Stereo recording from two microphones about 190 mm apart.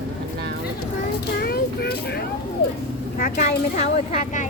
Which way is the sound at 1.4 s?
55° left (ahead or behind).